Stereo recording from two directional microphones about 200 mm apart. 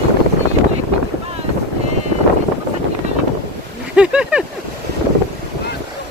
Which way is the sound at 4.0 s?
5° right (ahead or behind).